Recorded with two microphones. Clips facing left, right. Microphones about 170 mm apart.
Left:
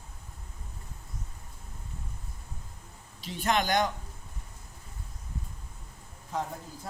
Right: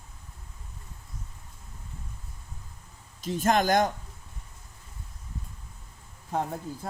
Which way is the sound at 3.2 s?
45° right (ahead or behind).